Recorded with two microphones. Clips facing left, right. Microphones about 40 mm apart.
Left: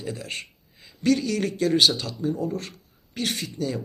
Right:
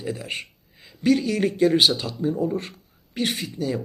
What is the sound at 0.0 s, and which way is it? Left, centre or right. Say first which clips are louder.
Speech: right 3 dB; centre.